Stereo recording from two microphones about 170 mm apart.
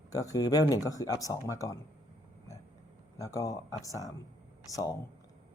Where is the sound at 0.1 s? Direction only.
20° left (ahead or behind).